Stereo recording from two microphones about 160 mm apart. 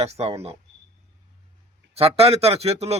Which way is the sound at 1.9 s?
40° right (ahead or behind).